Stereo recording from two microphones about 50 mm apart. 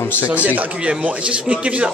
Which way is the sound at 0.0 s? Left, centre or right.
Left.